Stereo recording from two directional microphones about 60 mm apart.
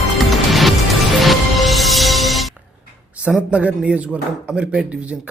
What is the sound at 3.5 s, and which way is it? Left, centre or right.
Speech, centre.